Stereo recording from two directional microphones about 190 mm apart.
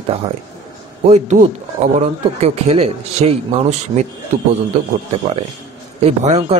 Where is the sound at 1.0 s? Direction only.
35° right (ahead or behind).